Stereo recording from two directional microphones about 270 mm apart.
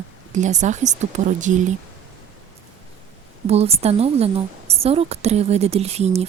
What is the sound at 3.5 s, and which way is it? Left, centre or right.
Speech, right.